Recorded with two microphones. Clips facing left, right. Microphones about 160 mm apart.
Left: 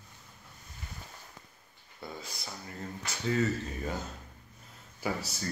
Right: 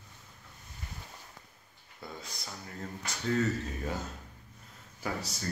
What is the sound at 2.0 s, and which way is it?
Speech, centre (ahead or behind).